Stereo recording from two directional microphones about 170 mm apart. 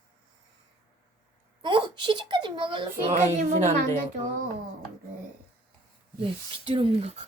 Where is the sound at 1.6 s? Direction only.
25° right (ahead or behind).